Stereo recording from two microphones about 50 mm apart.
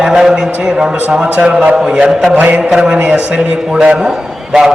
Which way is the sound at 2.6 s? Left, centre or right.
Centre.